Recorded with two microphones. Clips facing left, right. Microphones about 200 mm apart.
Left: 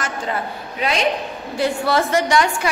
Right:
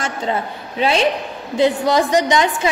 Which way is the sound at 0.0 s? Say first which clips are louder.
Right 3 dB; 25° right (ahead or behind).